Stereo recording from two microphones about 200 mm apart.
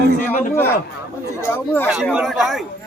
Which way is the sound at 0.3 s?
10° left (ahead or behind).